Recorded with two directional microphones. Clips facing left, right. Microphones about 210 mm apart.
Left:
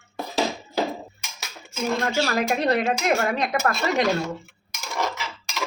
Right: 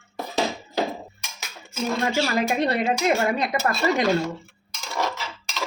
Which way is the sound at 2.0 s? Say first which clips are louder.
Right 2 dB; 5° right (ahead or behind).